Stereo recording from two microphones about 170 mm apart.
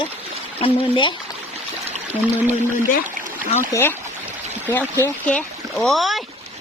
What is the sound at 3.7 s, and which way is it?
Speech, 15° left (ahead or behind).